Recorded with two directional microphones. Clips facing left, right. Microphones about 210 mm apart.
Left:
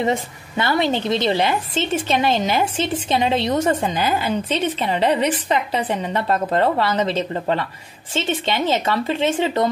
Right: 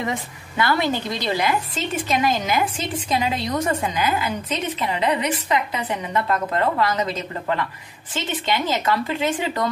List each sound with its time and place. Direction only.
0.0 s a woman's voice: 25° left (ahead or behind)